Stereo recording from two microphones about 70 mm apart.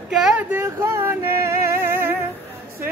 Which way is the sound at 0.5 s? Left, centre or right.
Right.